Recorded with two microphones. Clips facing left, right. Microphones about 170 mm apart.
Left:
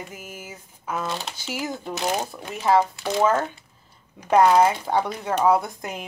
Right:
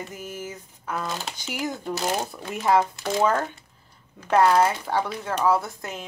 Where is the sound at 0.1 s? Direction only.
10° left (ahead or behind).